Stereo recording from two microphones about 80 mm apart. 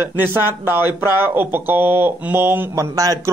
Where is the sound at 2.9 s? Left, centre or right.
Right.